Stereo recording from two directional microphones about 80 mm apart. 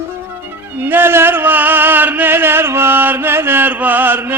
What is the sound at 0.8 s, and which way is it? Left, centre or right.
Chant, right.